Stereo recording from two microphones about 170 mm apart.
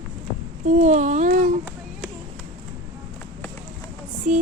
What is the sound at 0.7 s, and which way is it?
Babbling, 45° right (ahead or behind).